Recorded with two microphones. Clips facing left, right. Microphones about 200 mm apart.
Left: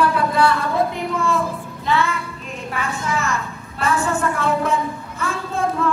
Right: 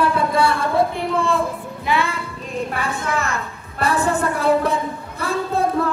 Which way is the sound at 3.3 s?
35° right (ahead or behind).